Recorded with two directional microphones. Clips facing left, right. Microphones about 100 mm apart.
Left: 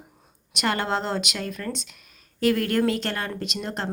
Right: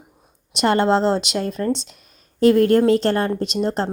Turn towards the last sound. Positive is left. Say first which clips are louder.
# right 9 dB
turn(degrees=-30)  # may be behind; listen again after turning